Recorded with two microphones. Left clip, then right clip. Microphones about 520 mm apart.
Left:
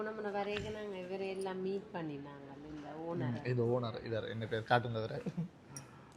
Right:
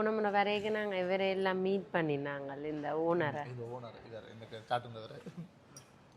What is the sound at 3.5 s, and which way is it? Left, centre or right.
A man's voice, left.